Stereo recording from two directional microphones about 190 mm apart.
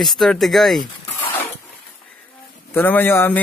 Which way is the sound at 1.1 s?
10° left (ahead or behind).